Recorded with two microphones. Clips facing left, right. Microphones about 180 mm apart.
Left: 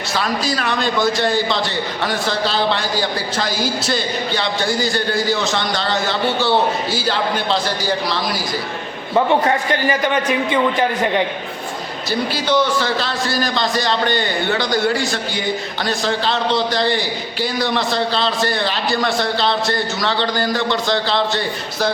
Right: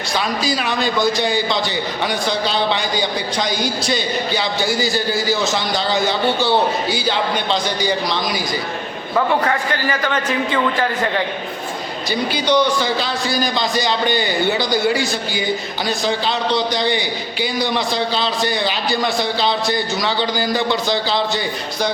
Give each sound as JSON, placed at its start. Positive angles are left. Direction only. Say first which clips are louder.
{"t": 0.2, "sound": "a man's voice", "louder": "even", "side_deg": 0}
{"t": 9.1, "sound": "a man's voice", "louder": "left 2 dB", "side_deg": 20}
{"t": 12.5, "sound": "a man's voice", "louder": "right 1 dB", "side_deg": 0}